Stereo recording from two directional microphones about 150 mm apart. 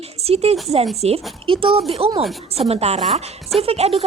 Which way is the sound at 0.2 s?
45° right (ahead or behind).